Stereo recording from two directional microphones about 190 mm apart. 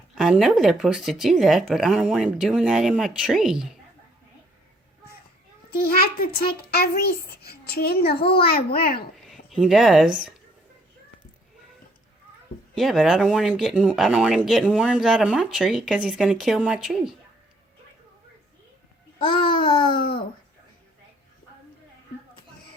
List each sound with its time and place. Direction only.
0.2 s speech: centre (ahead or behind)
5.7 s a child's voice: 55° left (ahead or behind)
9.1 s speech: centre (ahead or behind)
12.7 s speech: centre (ahead or behind)
19.5 s babbling: 50° left (ahead or behind)